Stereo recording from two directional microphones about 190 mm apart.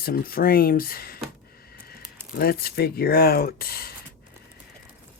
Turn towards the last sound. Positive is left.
turn(degrees=55)  # may be behind; listen again after turning